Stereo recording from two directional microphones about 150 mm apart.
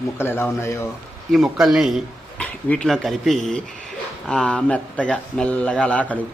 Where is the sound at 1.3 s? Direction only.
Centre (ahead or behind).